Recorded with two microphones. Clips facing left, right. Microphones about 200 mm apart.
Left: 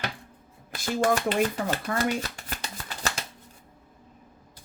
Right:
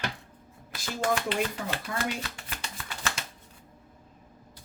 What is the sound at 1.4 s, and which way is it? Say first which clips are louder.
Shuffling cards: left 5 dB; 45° left (ahead or behind).